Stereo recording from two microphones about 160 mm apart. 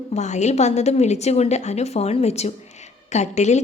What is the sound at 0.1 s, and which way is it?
A woman's voice, 45° left (ahead or behind).